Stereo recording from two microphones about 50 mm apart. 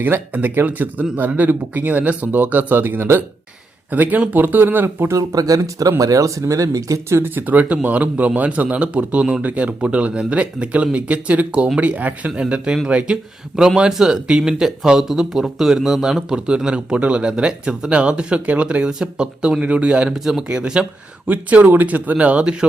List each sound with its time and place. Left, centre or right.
0.0 s speech: right
3.9 s speech: right
4.4 s speech: right
5.3 s speech: right
7.2 s speech: right; by 16.4 s centre
16.5 s speech: centre
21.2 s speech: right